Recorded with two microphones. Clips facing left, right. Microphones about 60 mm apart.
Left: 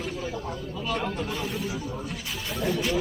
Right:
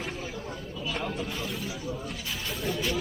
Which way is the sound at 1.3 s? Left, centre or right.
Centre.